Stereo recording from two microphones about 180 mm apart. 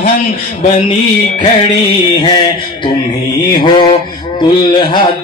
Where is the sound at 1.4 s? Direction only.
25° left (ahead or behind).